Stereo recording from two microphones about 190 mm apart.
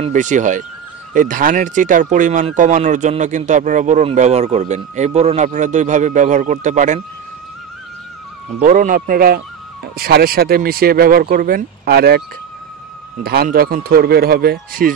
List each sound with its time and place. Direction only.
0.0 s speech: 40° right (ahead or behind)
8.5 s speech: 45° right (ahead or behind)
13.2 s speech: 55° right (ahead or behind)